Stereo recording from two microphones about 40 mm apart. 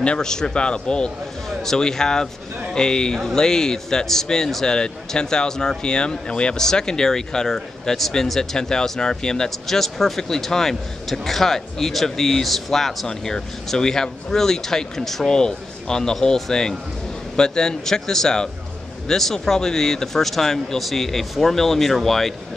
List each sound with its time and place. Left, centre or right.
0.0 s a man's voice: left
1.6 s a man's voice: centre
9.7 s speech: centre